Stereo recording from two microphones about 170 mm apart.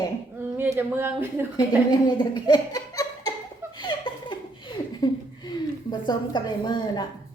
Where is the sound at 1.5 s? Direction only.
25° left (ahead or behind).